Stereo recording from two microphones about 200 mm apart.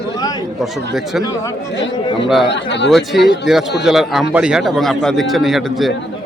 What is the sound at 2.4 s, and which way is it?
Speech, 60° left (ahead or behind).